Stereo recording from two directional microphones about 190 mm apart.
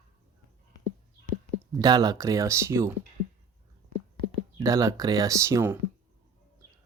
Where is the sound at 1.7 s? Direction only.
20° right (ahead or behind).